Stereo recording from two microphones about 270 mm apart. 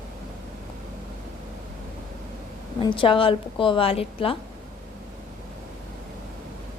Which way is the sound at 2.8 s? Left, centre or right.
Centre.